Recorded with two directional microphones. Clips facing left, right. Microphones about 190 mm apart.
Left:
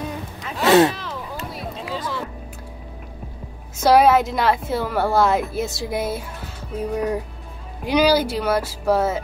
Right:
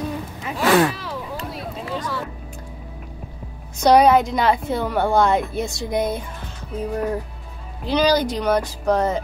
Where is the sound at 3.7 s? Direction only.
5° left (ahead or behind).